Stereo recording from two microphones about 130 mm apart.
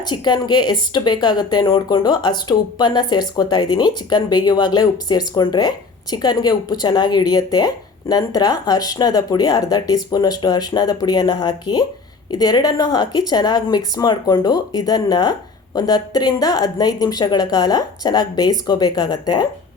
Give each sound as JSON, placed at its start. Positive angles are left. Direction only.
{"t": 0.1, "sound": "speech", "side_deg": 35}